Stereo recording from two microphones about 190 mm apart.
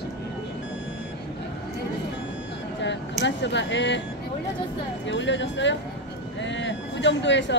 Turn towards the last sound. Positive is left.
turn(degrees=70)  # may be behind; listen again after turning